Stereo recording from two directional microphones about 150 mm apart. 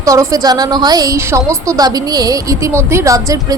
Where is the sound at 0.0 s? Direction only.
25° right (ahead or behind).